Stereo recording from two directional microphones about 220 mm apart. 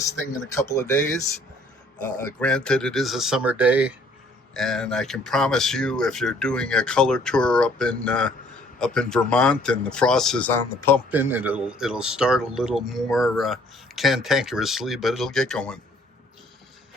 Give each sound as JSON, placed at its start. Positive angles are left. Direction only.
{"t": 0.5, "sound": "speech", "side_deg": 15}
{"t": 2.4, "sound": "speech", "side_deg": 5}
{"t": 11.1, "sound": "speech", "side_deg": -10}